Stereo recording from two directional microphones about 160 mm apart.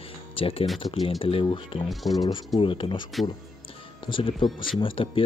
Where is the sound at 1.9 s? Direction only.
Centre (ahead or behind).